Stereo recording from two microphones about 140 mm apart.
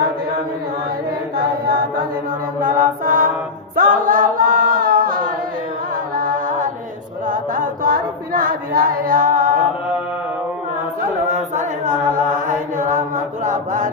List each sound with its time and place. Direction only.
2.6 s chant: 75° right (ahead or behind)
3.8 s choir: 75° right (ahead or behind)
6.1 s music: 80° right
7.3 s chant: 75° right (ahead or behind)
11.3 s chant: 60° right (ahead or behind)